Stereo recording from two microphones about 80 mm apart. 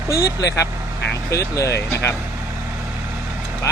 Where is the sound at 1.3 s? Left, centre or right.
Left.